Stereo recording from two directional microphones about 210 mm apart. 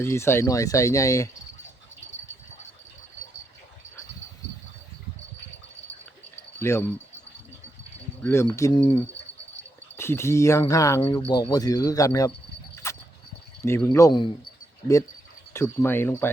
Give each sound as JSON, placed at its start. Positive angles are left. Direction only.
{"t": 0.0, "sound": "speech", "side_deg": 10}
{"t": 6.6, "sound": "speech", "side_deg": 10}
{"t": 8.2, "sound": "speech", "side_deg": 10}
{"t": 10.0, "sound": "speech", "side_deg": 10}
{"t": 12.7, "sound": "dog", "side_deg": 15}
{"t": 13.6, "sound": "speech", "side_deg": 15}
{"t": 15.5, "sound": "speech", "side_deg": 10}